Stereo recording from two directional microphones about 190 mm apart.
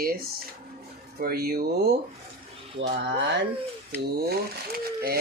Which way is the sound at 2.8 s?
65° right (ahead or behind).